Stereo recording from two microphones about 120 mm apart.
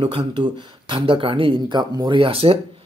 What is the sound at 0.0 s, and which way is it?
Speech, 40° right (ahead or behind).